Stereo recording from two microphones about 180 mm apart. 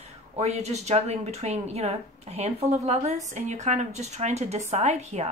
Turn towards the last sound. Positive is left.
turn(degrees=-40)  # may be behind; listen again after turning